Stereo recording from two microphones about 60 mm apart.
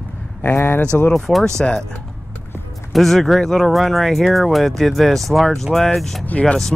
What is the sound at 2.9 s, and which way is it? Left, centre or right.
Speech, centre.